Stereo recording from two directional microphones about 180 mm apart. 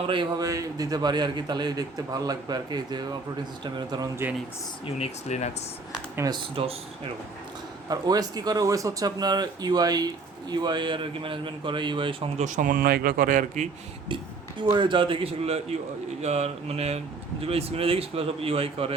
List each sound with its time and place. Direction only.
0.1 s a man's voice: 25° right (ahead or behind)
4.9 s speech: 40° left (ahead or behind)
6.1 s a man's voice: 20° right (ahead or behind)
12.5 s speech: 45° right (ahead or behind)
14.6 s a man's voice: 25° right (ahead or behind)